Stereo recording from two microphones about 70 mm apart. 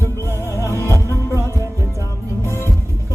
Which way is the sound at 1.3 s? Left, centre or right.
Right.